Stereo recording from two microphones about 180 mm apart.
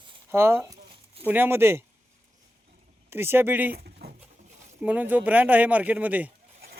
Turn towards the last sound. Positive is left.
turn(degrees=-10)  # may be behind; listen again after turning